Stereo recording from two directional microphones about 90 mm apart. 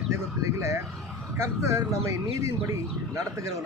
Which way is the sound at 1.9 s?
35° right (ahead or behind).